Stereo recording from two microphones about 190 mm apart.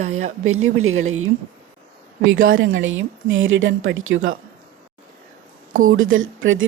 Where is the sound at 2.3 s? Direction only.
85° right.